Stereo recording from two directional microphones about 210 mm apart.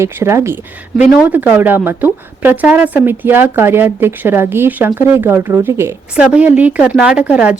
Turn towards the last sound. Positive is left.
turn(degrees=-5)  # may be behind; listen again after turning